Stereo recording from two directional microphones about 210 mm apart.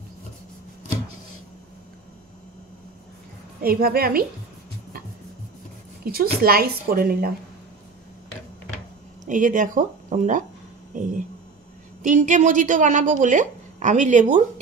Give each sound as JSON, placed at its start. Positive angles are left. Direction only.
{"t": 3.6, "sound": "speech", "side_deg": -45}
{"t": 6.1, "sound": "speech", "side_deg": -45}
{"t": 9.3, "sound": "speech", "side_deg": -40}